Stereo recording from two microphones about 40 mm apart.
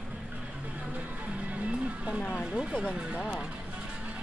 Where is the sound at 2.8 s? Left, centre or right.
Right.